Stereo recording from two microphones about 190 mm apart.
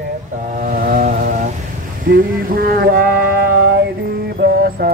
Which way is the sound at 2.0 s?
50° right (ahead or behind).